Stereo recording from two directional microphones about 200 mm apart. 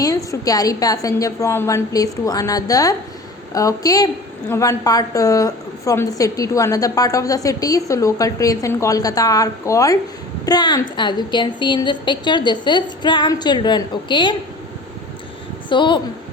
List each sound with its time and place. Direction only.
0.0 s a woman's voice: 15° left (ahead or behind)
15.7 s a woman's voice: 25° left (ahead or behind)